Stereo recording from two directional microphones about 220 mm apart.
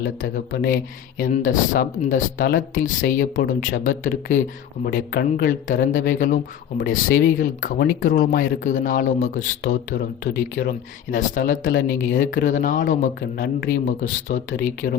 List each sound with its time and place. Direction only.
0.0 s speech: 45° left (ahead or behind)